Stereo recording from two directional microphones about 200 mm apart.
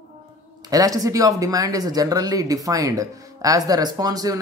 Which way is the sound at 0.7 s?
15° right (ahead or behind).